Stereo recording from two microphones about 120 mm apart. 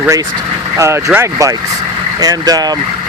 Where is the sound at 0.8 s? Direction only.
25° right (ahead or behind).